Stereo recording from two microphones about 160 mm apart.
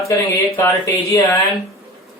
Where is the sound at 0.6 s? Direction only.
15° left (ahead or behind).